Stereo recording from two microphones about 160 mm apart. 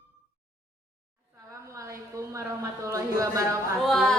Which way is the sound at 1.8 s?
20° right (ahead or behind).